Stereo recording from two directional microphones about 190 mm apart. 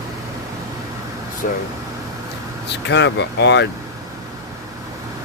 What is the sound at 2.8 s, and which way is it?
Speech, 70° left (ahead or behind).